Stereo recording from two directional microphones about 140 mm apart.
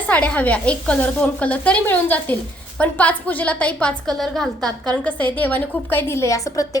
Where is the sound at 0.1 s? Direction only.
10° left (ahead or behind).